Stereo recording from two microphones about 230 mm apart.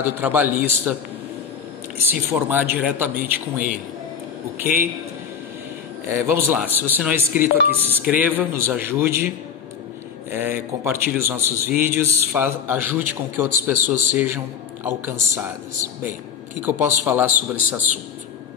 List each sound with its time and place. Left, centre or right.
0.0 s a man's voice: centre
2.3 s a man's voice: centre
6.2 s a man's voice: centre
7.3 s speech: left
7.8 s a man's voice: centre
10.3 s a man's voice: centre